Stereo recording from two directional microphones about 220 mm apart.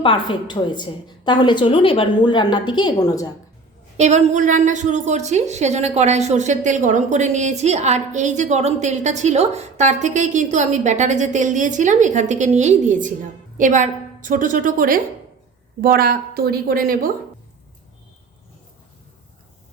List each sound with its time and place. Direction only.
0.0 s a woman's voice: 20° left (ahead or behind)
3.9 s a woman's voice: 30° right (ahead or behind)